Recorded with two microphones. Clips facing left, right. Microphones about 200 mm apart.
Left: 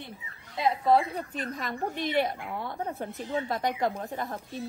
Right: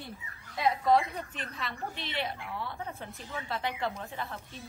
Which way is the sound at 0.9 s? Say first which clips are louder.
Left 3 dB; 35° left (ahead or behind).